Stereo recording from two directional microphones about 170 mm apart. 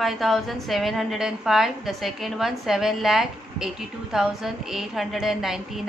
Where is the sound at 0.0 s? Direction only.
Centre (ahead or behind).